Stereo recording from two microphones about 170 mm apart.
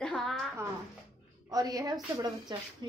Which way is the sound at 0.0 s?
Centre (ahead or behind).